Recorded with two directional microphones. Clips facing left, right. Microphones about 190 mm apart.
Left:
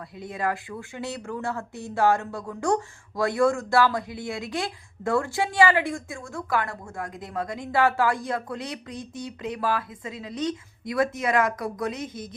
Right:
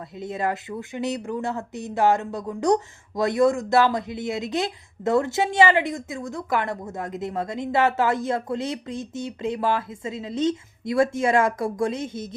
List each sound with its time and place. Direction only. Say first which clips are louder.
0.2 s speech: right 2 dB; 25° right (ahead or behind)